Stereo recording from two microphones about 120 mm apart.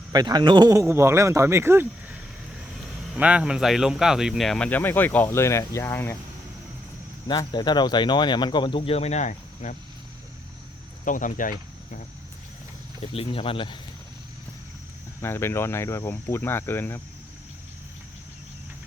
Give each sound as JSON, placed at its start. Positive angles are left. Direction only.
{"t": 0.1, "sound": "speech", "side_deg": -35}
{"t": 3.2, "sound": "speech", "side_deg": -10}
{"t": 7.3, "sound": "speech", "side_deg": 35}
{"t": 11.0, "sound": "speech", "side_deg": 90}
{"t": 13.0, "sound": "speech", "side_deg": 50}
{"t": 15.2, "sound": "speech", "side_deg": 20}